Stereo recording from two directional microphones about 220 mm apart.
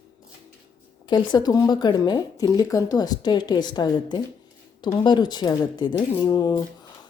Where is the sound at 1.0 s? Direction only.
20° left (ahead or behind).